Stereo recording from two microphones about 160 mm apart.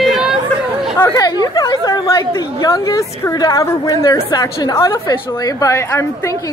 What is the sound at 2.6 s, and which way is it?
A woman's voice, 20° left (ahead or behind).